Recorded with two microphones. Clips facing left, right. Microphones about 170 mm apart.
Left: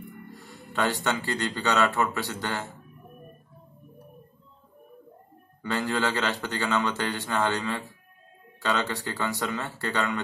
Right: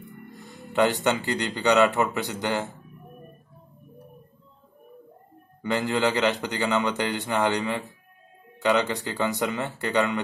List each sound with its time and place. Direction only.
0.7 s speech: 20° right (ahead or behind)
5.6 s a man's voice: 20° right (ahead or behind)